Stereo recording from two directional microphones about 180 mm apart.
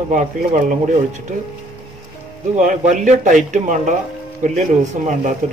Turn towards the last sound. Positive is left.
turn(degrees=-45)  # may be behind; listen again after turning